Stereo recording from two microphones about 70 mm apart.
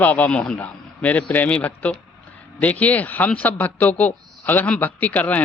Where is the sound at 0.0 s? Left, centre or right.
Left.